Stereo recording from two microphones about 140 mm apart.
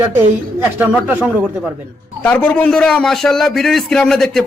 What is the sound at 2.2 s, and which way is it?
A man's voice, 10° left (ahead or behind).